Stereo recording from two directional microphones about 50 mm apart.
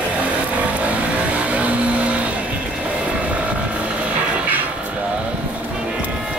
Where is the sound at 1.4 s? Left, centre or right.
Right.